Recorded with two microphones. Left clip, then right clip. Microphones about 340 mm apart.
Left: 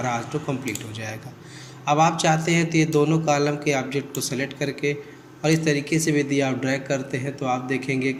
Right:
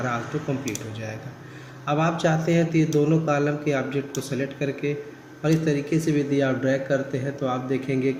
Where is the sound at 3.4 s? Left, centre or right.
Left.